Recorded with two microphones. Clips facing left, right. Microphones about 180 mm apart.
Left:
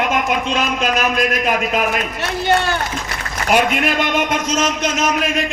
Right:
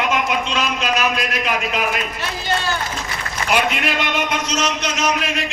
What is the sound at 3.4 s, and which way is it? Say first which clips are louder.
A man's voice: left 4 dB; 45° left (ahead or behind).